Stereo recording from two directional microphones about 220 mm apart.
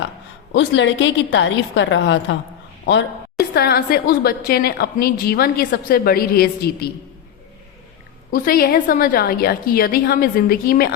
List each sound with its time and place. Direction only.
0.5 s a woman's voice: 55° left (ahead or behind)
3.5 s a woman's voice: 45° left (ahead or behind)
8.3 s a woman's voice: 40° left (ahead or behind)